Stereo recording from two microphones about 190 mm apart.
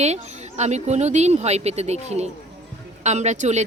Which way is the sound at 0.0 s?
35° right (ahead or behind).